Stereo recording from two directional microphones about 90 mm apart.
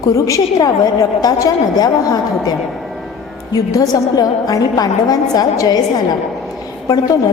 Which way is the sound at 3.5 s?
45° left (ahead or behind).